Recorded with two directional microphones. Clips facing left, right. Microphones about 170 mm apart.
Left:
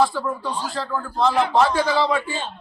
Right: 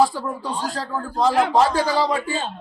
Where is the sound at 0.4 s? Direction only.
40° right (ahead or behind).